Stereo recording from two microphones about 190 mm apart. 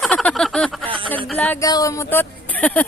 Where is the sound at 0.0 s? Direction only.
5° left (ahead or behind).